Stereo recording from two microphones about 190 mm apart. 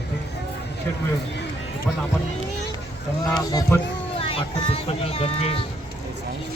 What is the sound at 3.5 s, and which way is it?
Speech, 20° left (ahead or behind).